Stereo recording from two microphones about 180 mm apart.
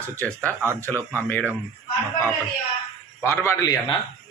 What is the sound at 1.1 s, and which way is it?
Speech, 10° left (ahead or behind).